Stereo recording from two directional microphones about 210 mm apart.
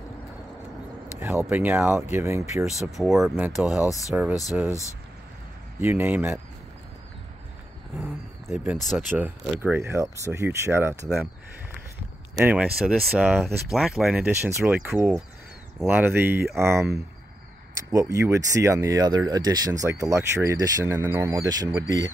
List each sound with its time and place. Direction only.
1.4 s speech: 10° right (ahead or behind)
2.6 s speech: centre (ahead or behind)
3.7 s speech: 15° left (ahead or behind)
4.1 s speech: 10° right (ahead or behind)
5.8 s speech: 10° right (ahead or behind)
8.0 s a sound: centre (ahead or behind)
8.8 s speech: 5° right (ahead or behind)
12.4 s speech: 5° right (ahead or behind)
17.9 s speech: 15° right (ahead or behind)